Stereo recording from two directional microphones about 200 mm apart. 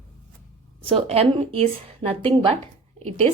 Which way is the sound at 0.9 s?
30° right (ahead or behind).